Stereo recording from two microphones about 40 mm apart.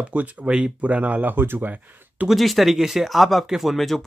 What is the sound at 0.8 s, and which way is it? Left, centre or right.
Speech, right.